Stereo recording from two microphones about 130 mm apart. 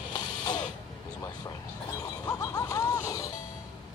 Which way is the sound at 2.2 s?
25° left (ahead or behind).